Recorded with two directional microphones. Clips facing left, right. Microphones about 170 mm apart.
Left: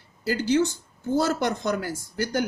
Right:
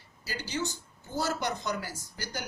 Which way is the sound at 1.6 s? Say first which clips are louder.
Left 8 dB; 55° left (ahead or behind).